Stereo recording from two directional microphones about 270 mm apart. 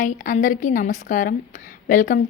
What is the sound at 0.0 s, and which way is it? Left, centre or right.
A woman's voice, left.